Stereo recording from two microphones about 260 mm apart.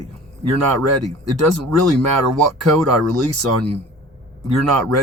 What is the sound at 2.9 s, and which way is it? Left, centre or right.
Speech, right.